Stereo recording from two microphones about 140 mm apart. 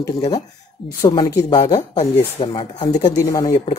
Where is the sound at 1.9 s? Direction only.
45° left (ahead or behind).